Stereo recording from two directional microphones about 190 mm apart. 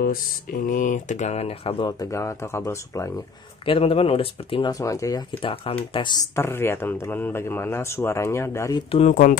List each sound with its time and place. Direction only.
0.0 s speech: 50° left (ahead or behind); by 3.1 s 15° left (ahead or behind)
3.6 s speech: 30° left (ahead or behind)
8.9 s speech: 40° left (ahead or behind)